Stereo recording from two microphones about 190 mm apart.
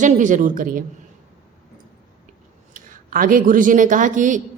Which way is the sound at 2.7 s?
45° right (ahead or behind).